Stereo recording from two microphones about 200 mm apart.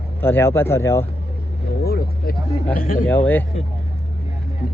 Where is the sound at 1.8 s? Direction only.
50° left (ahead or behind).